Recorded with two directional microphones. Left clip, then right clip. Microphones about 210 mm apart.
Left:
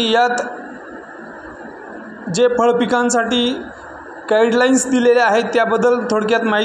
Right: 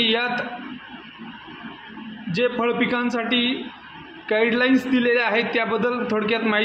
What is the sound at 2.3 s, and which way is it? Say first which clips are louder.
A man's voice: left 8 dB; 20° left (ahead or behind).